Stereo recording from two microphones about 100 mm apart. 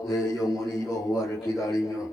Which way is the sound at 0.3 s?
35° left (ahead or behind).